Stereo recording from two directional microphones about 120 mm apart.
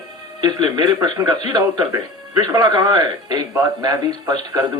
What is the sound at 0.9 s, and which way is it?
Speech, 35° right (ahead or behind).